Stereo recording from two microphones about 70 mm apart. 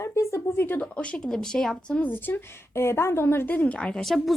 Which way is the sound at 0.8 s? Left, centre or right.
Centre.